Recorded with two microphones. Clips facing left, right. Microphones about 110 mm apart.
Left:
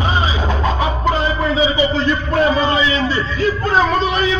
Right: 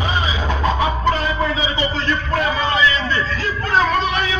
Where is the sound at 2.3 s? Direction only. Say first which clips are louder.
Left 5 dB; 20° left (ahead or behind).